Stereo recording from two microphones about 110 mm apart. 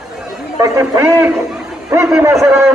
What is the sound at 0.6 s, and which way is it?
A man's voice, 25° right (ahead or behind).